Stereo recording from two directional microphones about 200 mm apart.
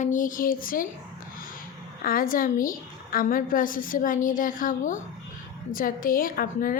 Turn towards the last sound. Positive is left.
turn(degrees=45)  # may be behind; listen again after turning